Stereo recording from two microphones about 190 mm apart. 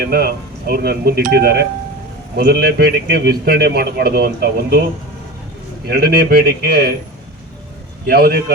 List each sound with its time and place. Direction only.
0.0 s a man's voice: 55° right (ahead or behind)
5.9 s a man's voice: 55° right (ahead or behind)
8.0 s a man's voice: 55° right (ahead or behind)